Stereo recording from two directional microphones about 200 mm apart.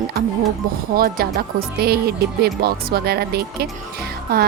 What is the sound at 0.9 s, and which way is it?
Speech, 45° right (ahead or behind).